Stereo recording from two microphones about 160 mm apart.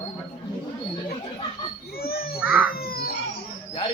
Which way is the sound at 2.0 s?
70° left (ahead or behind).